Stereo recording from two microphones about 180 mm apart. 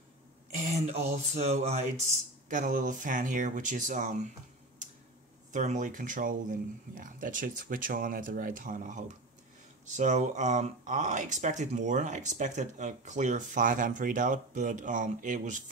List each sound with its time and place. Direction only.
0.7 s speech: 35° right (ahead or behind)
5.5 s speech: 40° right (ahead or behind)